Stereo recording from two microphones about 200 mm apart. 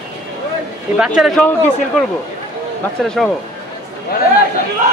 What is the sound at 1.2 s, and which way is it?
Speech, 5° left (ahead or behind).